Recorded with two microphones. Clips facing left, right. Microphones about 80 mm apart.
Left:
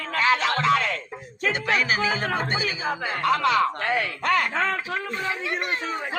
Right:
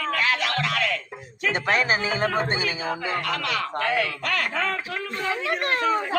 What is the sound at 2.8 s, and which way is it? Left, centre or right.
Speech, left.